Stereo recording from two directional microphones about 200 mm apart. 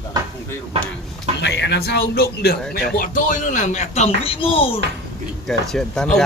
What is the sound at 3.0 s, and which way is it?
Speech, 40° left (ahead or behind).